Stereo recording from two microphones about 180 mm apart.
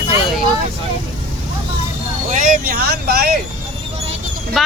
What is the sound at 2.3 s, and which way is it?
Vehicle, 45° right (ahead or behind).